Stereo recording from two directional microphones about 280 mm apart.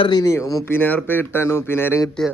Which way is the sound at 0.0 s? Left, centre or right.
Centre.